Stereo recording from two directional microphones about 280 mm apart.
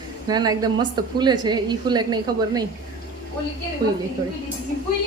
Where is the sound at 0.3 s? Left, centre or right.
Centre.